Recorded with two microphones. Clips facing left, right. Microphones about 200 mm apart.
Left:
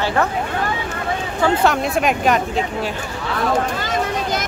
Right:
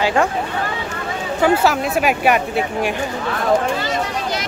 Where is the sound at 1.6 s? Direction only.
Centre (ahead or behind).